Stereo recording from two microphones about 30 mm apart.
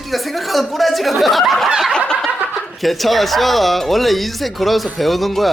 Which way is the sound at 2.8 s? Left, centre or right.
Centre.